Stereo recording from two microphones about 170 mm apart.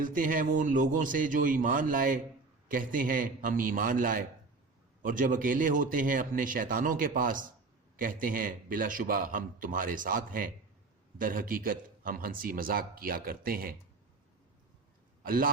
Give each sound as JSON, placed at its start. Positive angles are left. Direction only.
{"t": 0.0, "sound": "a man's voice", "side_deg": -50}
{"t": 15.3, "sound": "a man's voice", "side_deg": -55}